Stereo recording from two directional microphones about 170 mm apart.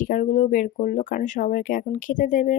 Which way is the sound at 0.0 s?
55° left (ahead or behind).